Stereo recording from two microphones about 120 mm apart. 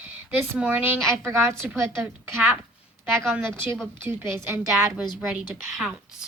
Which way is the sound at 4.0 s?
15° right (ahead or behind).